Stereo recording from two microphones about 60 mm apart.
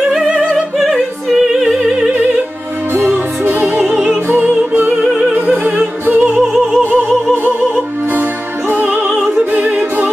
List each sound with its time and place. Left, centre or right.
0.3 s opera: right
0.6 s opera: centre
2.9 s music: right
5.1 s opera: right
6.5 s opera: centre
7.4 s music: right